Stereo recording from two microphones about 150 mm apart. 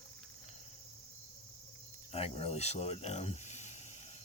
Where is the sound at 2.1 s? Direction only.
40° left (ahead or behind).